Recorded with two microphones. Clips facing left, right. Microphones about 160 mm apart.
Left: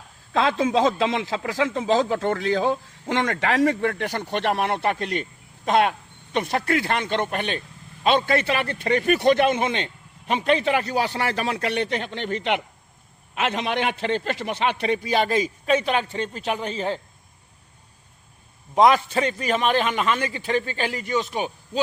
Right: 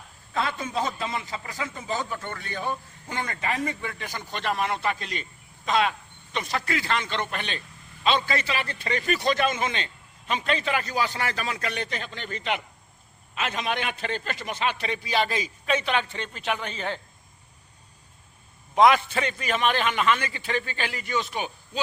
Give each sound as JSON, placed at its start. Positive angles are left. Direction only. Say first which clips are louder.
{"t": 0.3, "sound": "a man's voice", "louder": "left 8 dB", "side_deg": 90}
{"t": 18.7, "sound": "a man's voice", "louder": "left 2 dB", "side_deg": 35}